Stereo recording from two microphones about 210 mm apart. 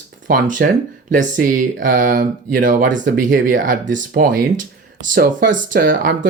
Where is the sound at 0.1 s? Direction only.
40° right (ahead or behind).